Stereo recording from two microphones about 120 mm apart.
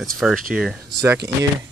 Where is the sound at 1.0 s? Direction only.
20° right (ahead or behind).